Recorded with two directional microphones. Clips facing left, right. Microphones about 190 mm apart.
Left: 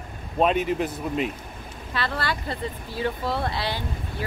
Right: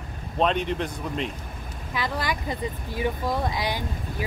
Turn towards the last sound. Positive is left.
turn(degrees=-15)  # may be behind; listen again after turning